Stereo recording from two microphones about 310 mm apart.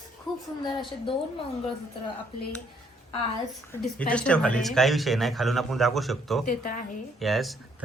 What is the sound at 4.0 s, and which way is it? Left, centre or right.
Speech, centre.